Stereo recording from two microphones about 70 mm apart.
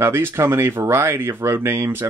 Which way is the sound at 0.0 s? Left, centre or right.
Right.